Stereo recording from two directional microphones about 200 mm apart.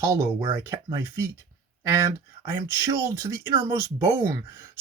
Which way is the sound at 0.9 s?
15° right (ahead or behind).